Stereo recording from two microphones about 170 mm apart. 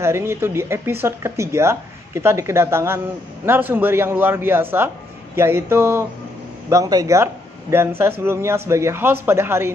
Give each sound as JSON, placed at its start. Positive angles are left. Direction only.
{"t": 0.0, "sound": "speech", "side_deg": -15}